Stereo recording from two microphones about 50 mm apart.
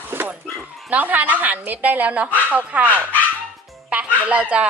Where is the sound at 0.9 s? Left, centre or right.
Right.